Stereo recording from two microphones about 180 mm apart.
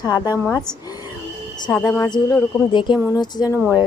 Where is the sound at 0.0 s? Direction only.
20° left (ahead or behind).